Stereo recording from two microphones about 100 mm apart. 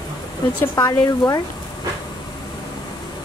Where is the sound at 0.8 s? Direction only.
35° left (ahead or behind).